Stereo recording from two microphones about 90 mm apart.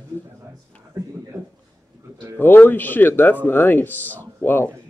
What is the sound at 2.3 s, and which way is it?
Speech, 20° left (ahead or behind).